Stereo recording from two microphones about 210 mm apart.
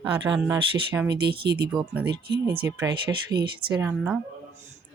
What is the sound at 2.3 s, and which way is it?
Speech, 50° right (ahead or behind).